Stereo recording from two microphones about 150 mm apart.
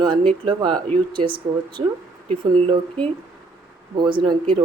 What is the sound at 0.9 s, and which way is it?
Speech, 35° right (ahead or behind).